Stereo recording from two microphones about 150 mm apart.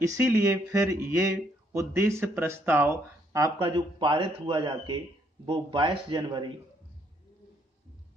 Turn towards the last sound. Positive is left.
turn(degrees=-30)  # may be behind; listen again after turning